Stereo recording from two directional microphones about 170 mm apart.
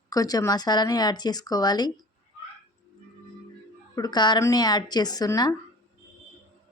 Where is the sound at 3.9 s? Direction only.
25° left (ahead or behind).